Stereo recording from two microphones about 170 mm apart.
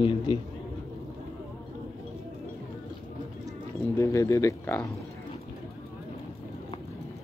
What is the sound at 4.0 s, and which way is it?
Speech, 15° left (ahead or behind).